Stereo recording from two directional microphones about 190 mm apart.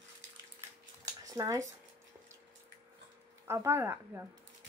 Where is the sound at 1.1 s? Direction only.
15° right (ahead or behind).